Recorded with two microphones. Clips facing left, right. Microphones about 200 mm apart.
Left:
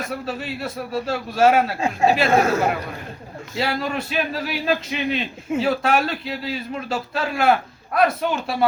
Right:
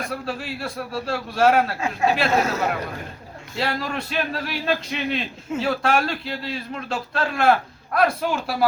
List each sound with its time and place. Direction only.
0.1 s speech: centre (ahead or behind)
1.8 s speech: 30° left (ahead or behind)
2.3 s speech: 50° left (ahead or behind)
3.5 s speech: centre (ahead or behind)